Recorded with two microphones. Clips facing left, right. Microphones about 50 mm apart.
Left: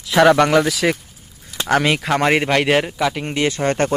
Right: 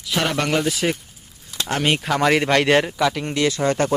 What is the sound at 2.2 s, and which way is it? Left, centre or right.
Speech, centre.